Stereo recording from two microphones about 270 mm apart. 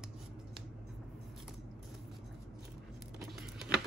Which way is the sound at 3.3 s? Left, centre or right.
Centre.